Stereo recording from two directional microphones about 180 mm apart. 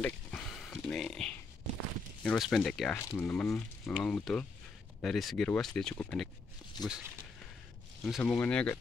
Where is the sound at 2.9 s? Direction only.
15° left (ahead or behind).